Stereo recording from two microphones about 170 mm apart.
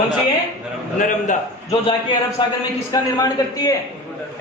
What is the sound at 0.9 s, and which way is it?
Speech, 50° left (ahead or behind).